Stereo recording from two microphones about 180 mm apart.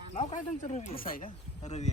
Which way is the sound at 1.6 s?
40° left (ahead or behind).